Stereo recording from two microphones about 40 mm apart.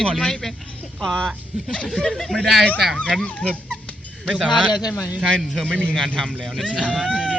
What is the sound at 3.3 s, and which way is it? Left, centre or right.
Speech, left.